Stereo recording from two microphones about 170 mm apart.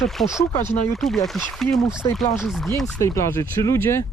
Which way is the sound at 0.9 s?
Centre (ahead or behind).